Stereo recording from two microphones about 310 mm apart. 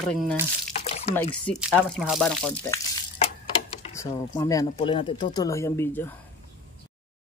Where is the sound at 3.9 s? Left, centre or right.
Centre.